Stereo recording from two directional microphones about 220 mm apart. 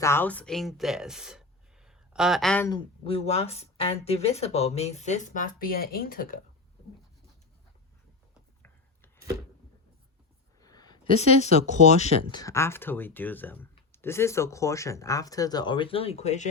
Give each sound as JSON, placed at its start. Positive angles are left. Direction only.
{"t": 0.0, "sound": "speech", "side_deg": 10}
{"t": 2.6, "sound": "speech", "side_deg": 20}
{"t": 10.6, "sound": "a sound", "side_deg": 15}
{"t": 11.2, "sound": "speech", "side_deg": 30}
{"t": 12.4, "sound": "speech", "side_deg": 15}